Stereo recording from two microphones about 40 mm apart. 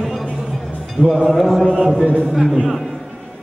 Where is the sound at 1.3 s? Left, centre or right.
Centre.